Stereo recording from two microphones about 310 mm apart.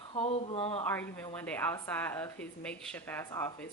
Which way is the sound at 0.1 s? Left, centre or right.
Centre.